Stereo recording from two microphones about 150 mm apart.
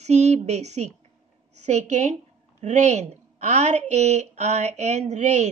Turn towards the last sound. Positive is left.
turn(degrees=-50)  # may be behind; listen again after turning